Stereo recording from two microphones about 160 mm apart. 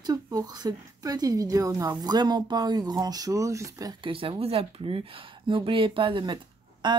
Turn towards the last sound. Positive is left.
turn(degrees=-30)  # may be behind; listen again after turning